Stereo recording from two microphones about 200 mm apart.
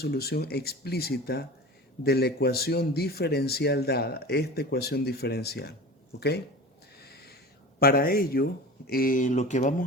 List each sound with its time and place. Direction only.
0.0 s speech: 50° left (ahead or behind)
7.0 s owl: 50° left (ahead or behind)
7.8 s speech: 50° left (ahead or behind)